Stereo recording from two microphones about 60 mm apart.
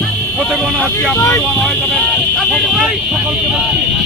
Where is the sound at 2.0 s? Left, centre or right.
Centre.